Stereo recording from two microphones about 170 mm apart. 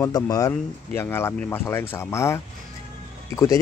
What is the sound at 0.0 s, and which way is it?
Speech, 20° left (ahead or behind).